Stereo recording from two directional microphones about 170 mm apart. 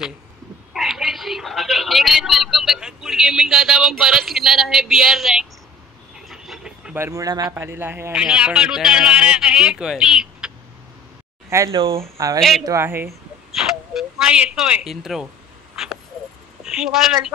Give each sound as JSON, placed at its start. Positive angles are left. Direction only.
{"t": 0.7, "sound": "speech", "side_deg": 0}
{"t": 6.1, "sound": "a sound", "side_deg": -5}
{"t": 7.0, "sound": "a man's voice", "side_deg": -20}
{"t": 11.5, "sound": "speech", "side_deg": -20}
{"t": 12.4, "sound": "a man's voice", "side_deg": 0}
{"t": 12.6, "sound": "speech", "side_deg": -15}
{"t": 13.6, "sound": "a sound", "side_deg": 0}
{"t": 16.6, "sound": "a woman's voice", "side_deg": -5}